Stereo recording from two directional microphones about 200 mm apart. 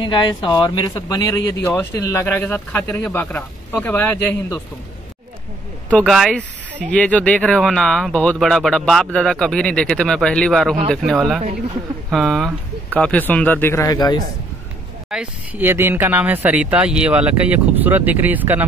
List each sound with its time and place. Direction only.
0.0 s speech: 25° left (ahead or behind)
5.9 s speech: 5° left (ahead or behind); by 14.2 s 20° left (ahead or behind)
15.0 s speech: 5° right (ahead or behind)